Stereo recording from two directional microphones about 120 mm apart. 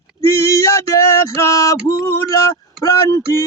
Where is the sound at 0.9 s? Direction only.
25° left (ahead or behind).